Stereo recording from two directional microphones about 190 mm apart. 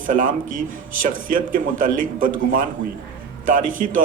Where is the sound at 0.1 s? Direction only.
45° right (ahead or behind).